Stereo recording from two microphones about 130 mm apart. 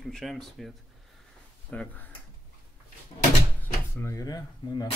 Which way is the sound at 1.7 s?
15° left (ahead or behind).